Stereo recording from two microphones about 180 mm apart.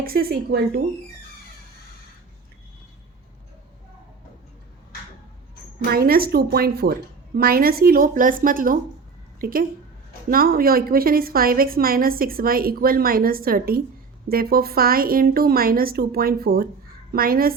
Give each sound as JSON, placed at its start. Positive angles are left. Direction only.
{"t": 0.0, "sound": "a woman's voice", "side_deg": -55}
{"t": 5.9, "sound": "a woman's voice", "side_deg": -55}